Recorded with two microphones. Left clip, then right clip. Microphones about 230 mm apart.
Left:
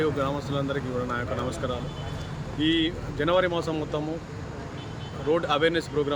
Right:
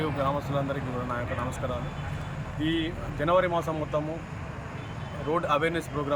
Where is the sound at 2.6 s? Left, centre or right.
Centre.